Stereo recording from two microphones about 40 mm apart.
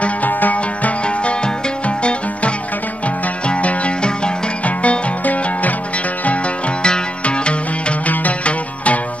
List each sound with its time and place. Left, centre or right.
0.0 s music: left
1.0 s music: left
4.6 s music: left
6.8 s music: left
8.1 s music: left